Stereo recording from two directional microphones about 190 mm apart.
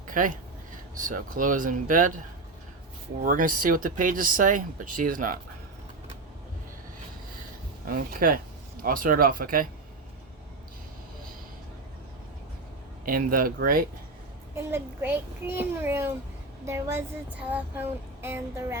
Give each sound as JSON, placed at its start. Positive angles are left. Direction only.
{"t": 0.1, "sound": "speech", "side_deg": -45}
{"t": 7.9, "sound": "speech", "side_deg": -50}
{"t": 13.1, "sound": "speech", "side_deg": -50}
{"t": 14.5, "sound": "speech", "side_deg": -10}